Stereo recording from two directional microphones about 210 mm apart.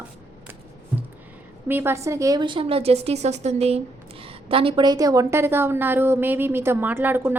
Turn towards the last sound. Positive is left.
turn(degrees=-10)  # may be behind; listen again after turning